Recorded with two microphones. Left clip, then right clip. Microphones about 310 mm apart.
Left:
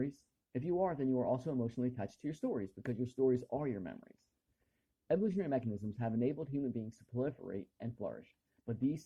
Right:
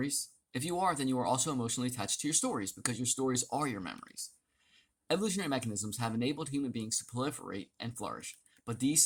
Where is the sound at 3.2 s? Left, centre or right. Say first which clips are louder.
Even; right.